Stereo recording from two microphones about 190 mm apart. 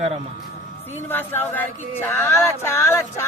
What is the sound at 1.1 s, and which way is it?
Speech, 10° left (ahead or behind).